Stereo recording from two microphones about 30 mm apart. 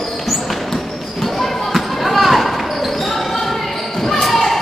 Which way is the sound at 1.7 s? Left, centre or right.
Centre.